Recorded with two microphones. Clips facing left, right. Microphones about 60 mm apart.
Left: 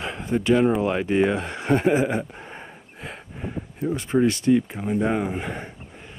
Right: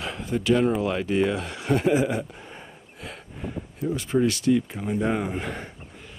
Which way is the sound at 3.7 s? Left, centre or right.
Left.